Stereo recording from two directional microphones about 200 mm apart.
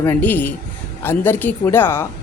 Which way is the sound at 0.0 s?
10° left (ahead or behind).